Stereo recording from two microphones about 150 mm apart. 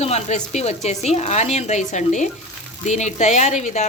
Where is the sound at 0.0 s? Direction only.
45° left (ahead or behind).